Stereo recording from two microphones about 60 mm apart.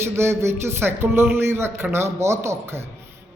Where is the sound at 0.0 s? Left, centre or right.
Right.